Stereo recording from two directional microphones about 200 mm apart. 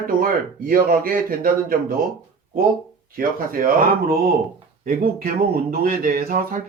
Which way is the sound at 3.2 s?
45° right (ahead or behind).